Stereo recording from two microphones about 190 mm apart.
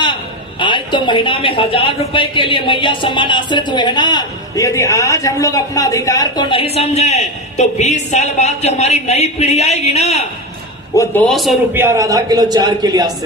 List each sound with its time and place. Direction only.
0.6 s a woman's voice: 25° left (ahead or behind)
10.9 s a man's voice: 15° left (ahead or behind)
11.7 s a man's voice: 15° right (ahead or behind)